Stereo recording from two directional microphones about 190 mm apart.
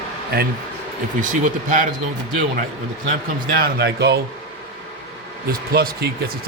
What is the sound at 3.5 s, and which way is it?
Speech, 55° right (ahead or behind).